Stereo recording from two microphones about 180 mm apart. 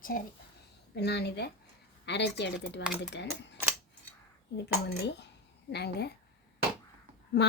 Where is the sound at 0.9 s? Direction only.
65° left (ahead or behind).